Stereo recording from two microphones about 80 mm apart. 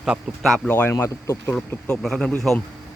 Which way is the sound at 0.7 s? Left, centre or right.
Left.